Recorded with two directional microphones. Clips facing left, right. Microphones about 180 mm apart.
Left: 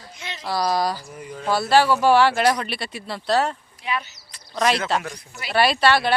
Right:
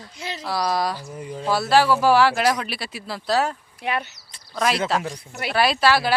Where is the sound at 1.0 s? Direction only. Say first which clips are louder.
Right 3 dB; 25° right (ahead or behind).